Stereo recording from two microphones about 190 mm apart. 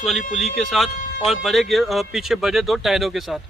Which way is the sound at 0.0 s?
Centre (ahead or behind).